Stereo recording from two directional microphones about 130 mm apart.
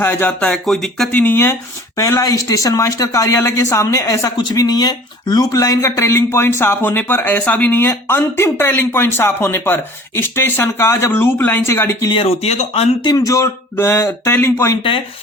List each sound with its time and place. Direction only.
0.0 s speech: 15° left (ahead or behind)
1.1 s speech: 15° left (ahead or behind)
12.0 s speech: 45° left (ahead or behind)
13.0 s speech: 30° left (ahead or behind)